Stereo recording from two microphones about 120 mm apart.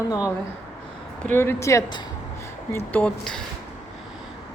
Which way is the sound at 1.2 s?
20° left (ahead or behind).